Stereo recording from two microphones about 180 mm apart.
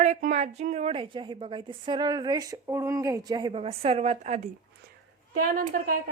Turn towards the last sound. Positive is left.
turn(degrees=-50)  # may be behind; listen again after turning